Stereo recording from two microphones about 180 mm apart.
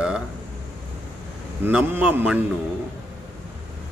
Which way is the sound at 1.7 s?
10° right (ahead or behind).